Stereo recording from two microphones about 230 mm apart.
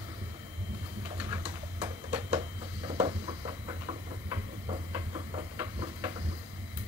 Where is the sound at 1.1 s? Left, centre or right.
Centre.